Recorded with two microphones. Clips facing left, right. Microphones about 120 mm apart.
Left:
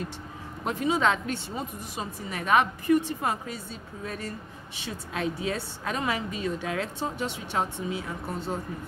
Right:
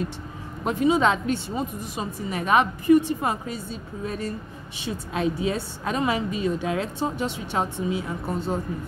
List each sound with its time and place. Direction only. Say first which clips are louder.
0.7 s a woman's voice: right 5 dB; 20° right (ahead or behind)